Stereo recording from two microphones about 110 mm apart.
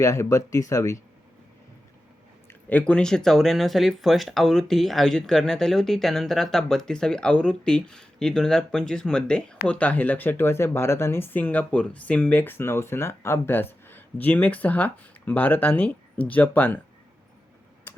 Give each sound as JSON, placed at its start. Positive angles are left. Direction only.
{"t": 0.0, "sound": "speech", "side_deg": 30}
{"t": 2.5, "sound": "speech", "side_deg": 15}